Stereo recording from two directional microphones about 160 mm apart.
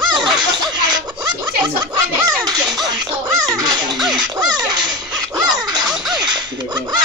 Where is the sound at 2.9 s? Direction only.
25° right (ahead or behind).